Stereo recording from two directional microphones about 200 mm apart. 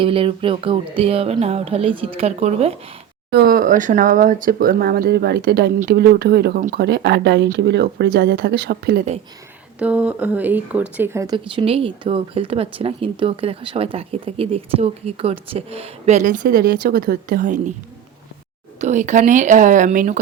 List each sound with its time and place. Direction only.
0.0 s speech: 25° right (ahead or behind)
3.2 s speech: 50° right (ahead or behind)
9.7 s speech: 5° right (ahead or behind)
11.5 s speech: 30° right (ahead or behind); by 17.6 s 45° right (ahead or behind)
18.8 s a woman's voice: 35° right (ahead or behind)